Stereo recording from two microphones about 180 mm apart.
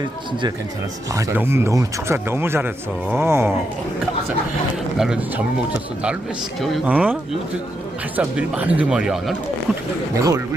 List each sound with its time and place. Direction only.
1.1 s speech: 15° right (ahead or behind)
4.9 s speech: 5° right (ahead or behind)
6.6 s speech: centre (ahead or behind)
10.2 s speech: 15° right (ahead or behind)